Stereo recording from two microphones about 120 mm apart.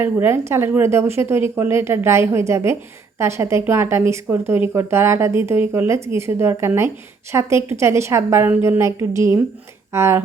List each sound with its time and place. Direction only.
0.0 s speech: 20° right (ahead or behind)